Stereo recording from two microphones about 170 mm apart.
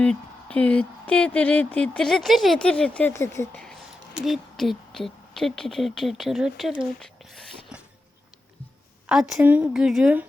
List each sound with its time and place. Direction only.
0.0 s speech: 5° left (ahead or behind)
3.6 s speech: centre (ahead or behind)
7.0 s a sound: centre (ahead or behind)
9.0 s a woman's voice: 5° right (ahead or behind)